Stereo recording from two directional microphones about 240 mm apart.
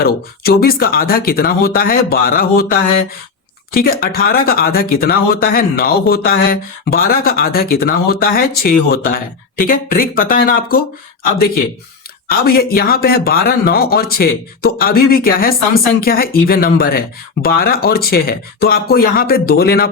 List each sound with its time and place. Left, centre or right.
0.0 s speech: left
12.3 s speech: left